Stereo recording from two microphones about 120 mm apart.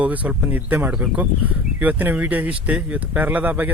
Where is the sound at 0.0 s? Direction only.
15° right (ahead or behind).